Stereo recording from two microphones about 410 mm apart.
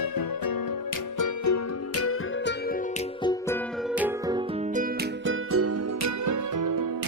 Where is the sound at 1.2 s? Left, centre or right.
Left.